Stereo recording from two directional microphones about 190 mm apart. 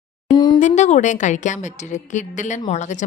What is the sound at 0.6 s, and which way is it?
A woman's voice, 40° left (ahead or behind).